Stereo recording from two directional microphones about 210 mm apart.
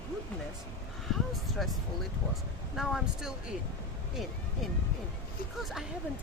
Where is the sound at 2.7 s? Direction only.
Centre (ahead or behind).